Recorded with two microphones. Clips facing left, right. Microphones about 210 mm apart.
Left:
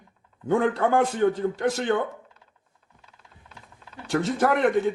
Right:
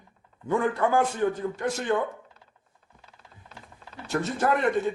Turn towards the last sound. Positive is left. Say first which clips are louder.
# left 3 dB
turn(degrees=75)  # may be behind; listen again after turning